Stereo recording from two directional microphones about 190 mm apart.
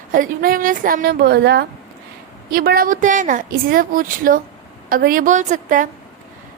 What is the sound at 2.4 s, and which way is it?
A woman's voice, 50° right (ahead or behind).